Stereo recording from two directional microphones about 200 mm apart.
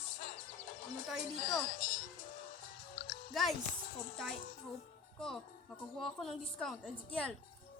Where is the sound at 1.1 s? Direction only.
Centre (ahead or behind).